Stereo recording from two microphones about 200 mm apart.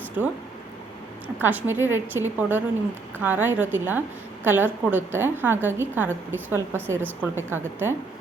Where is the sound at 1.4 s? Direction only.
10° right (ahead or behind).